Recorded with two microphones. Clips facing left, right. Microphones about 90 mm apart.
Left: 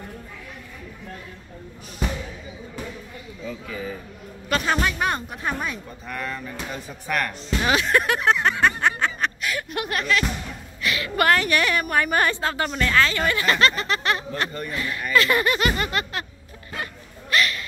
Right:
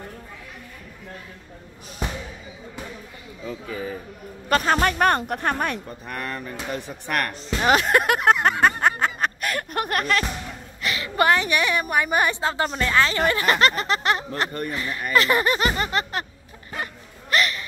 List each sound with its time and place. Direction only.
3.4 s speech: 30° right (ahead or behind)
4.5 s cattle: 40° right (ahead or behind)
6.7 s speech: 55° right (ahead or behind)
7.6 s a sound: 35° right (ahead or behind)
10.8 s a woman's voice: 30° right (ahead or behind)
16.7 s a sound: 30° right (ahead or behind)